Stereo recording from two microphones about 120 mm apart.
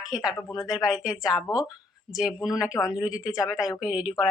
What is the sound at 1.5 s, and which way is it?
Speech, 35° left (ahead or behind).